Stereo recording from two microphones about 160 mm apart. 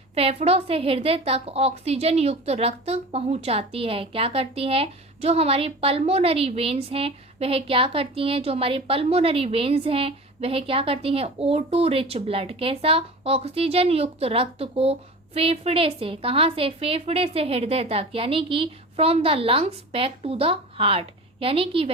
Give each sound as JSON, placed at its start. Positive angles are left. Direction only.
{"t": 0.1, "sound": "a woman's voice", "side_deg": -40}